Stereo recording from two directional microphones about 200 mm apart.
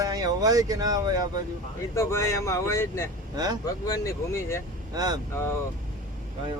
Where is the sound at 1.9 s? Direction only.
15° left (ahead or behind).